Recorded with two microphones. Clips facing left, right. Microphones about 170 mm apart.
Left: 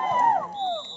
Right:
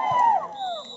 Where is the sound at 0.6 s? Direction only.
15° left (ahead or behind).